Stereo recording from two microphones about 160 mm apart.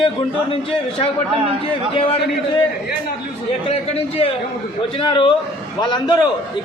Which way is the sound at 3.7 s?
40° left (ahead or behind).